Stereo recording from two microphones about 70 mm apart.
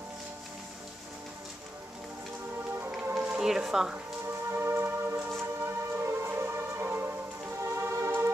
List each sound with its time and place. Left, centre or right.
3.2 s speech: centre
4.5 s music: right
7.7 s music: right